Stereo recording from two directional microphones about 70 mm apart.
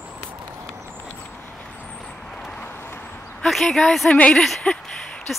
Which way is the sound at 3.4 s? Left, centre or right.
Centre.